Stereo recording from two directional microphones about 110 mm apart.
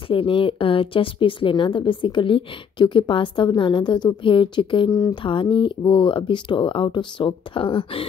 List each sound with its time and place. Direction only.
0.1 s a woman's voice: 55° left (ahead or behind)
4.9 s a sound: 35° left (ahead or behind)
5.2 s a woman's voice: 50° left (ahead or behind)